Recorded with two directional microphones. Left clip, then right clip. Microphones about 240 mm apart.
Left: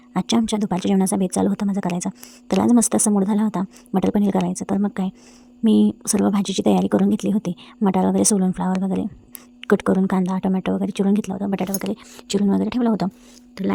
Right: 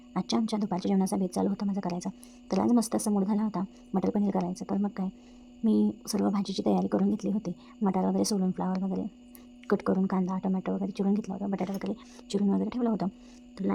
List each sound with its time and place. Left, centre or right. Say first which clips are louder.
0.1 s a woman's voice: left 9 dB; left